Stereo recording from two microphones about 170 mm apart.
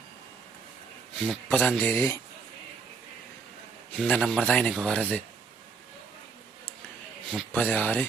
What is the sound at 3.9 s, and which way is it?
Speech, 5° left (ahead or behind).